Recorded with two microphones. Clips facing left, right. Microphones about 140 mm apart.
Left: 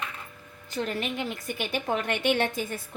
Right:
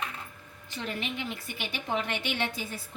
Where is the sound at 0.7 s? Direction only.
45° left (ahead or behind).